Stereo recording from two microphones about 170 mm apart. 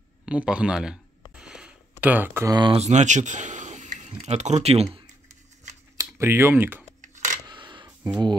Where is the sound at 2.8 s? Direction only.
45° right (ahead or behind).